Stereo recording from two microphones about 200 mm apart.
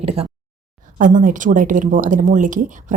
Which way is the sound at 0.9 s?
40° right (ahead or behind).